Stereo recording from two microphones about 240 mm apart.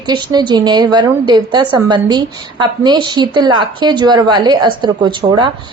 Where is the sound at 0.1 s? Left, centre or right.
Centre.